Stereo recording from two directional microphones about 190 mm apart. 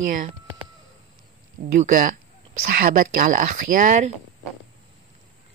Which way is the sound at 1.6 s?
45° right (ahead or behind).